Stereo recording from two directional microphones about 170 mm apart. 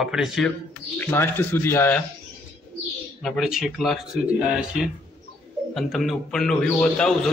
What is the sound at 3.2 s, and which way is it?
A man's voice, centre (ahead or behind).